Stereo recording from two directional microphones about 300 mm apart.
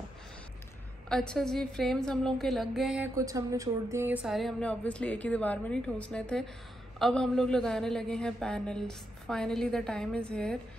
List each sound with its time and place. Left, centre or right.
1.0 s a woman's voice: centre